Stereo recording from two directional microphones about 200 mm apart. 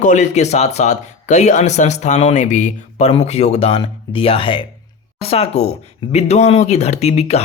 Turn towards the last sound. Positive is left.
turn(degrees=30)  # may be behind; listen again after turning